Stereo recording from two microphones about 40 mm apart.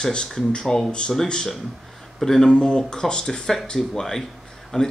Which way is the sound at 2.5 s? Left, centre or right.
Centre.